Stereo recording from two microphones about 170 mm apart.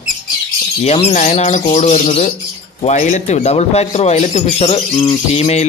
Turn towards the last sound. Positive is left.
turn(degrees=40)  # may be behind; listen again after turning